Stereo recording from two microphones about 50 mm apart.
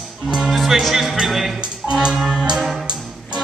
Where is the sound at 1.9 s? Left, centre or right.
Centre.